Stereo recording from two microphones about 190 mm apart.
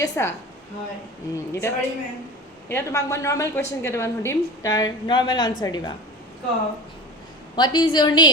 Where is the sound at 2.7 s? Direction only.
15° left (ahead or behind).